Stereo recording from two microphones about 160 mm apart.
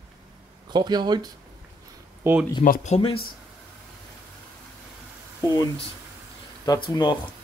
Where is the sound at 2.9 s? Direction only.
35° left (ahead or behind).